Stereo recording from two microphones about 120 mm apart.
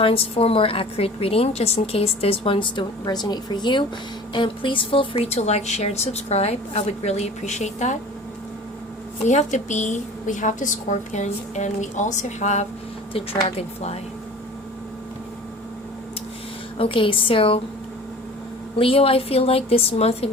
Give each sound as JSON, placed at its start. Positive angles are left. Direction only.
{"t": 0.0, "sound": "a woman's voice", "side_deg": 50}
{"t": 9.2, "sound": "a woman's voice", "side_deg": 80}
{"t": 13.1, "sound": "a woman's voice", "side_deg": 55}
{"t": 16.7, "sound": "a woman's voice", "side_deg": 50}
{"t": 18.8, "sound": "a woman's voice", "side_deg": 50}